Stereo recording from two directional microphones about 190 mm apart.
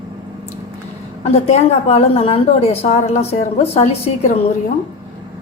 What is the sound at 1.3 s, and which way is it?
A woman's voice, 35° left (ahead or behind).